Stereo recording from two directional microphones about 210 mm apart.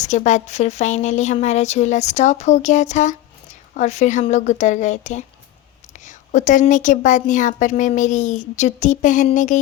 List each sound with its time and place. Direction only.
0.0 s a woman's voice: 35° left (ahead or behind)